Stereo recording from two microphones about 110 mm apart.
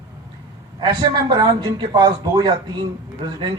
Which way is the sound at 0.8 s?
40° right (ahead or behind).